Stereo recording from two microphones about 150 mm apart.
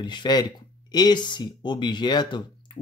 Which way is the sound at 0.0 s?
30° left (ahead or behind).